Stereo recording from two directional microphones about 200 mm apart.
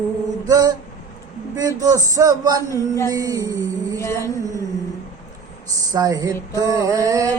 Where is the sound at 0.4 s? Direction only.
20° right (ahead or behind).